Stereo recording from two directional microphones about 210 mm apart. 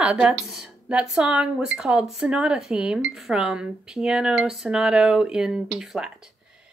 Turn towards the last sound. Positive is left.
turn(degrees=-5)  # may be behind; listen again after turning